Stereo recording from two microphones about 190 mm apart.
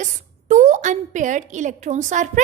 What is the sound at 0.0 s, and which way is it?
A woman's voice, 40° right (ahead or behind).